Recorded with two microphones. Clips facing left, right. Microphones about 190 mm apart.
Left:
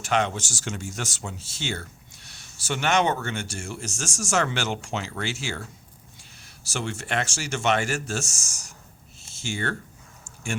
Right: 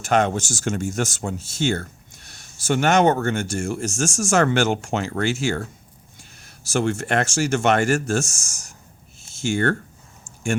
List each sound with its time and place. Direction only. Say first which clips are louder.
0.0 s speech: right 5 dB; 45° right (ahead or behind)